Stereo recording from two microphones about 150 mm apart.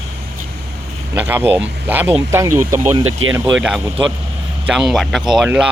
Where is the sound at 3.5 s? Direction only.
5° right (ahead or behind).